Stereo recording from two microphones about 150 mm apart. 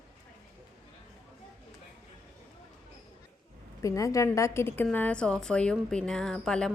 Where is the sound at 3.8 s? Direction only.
20° left (ahead or behind).